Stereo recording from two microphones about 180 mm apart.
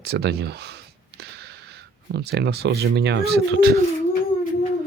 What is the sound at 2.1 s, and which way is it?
Speech, 65° right (ahead or behind).